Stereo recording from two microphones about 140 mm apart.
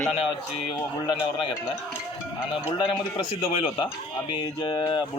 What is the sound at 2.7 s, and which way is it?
Speech, 35° left (ahead or behind).